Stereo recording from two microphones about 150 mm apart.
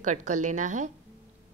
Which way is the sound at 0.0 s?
55° right (ahead or behind).